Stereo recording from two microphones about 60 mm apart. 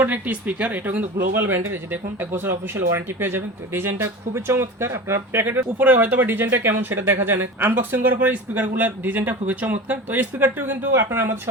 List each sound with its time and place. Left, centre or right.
0.0 s speech: right
10.9 s speech: right